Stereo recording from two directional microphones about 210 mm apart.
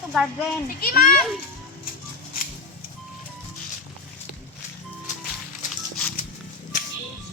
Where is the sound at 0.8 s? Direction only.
45° left (ahead or behind).